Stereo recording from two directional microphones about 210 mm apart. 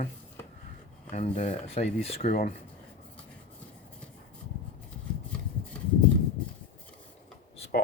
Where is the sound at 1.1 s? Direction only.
35° left (ahead or behind).